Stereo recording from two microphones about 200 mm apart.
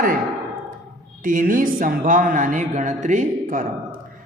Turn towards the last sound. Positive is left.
turn(degrees=-40)  # may be behind; listen again after turning